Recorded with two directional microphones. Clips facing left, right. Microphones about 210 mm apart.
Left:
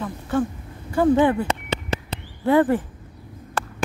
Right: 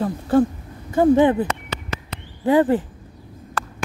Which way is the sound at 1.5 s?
30° left (ahead or behind).